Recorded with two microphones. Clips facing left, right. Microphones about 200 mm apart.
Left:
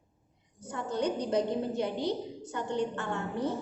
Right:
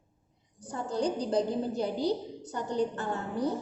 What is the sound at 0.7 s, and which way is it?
A woman's voice, 35° right (ahead or behind).